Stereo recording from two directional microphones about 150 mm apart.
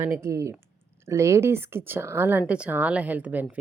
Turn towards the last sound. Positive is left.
turn(degrees=-10)  # may be behind; listen again after turning